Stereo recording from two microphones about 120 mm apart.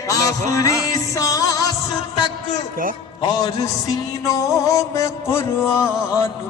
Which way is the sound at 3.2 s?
35° left (ahead or behind).